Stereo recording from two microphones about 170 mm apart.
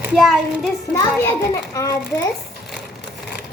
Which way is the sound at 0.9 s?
15° left (ahead or behind).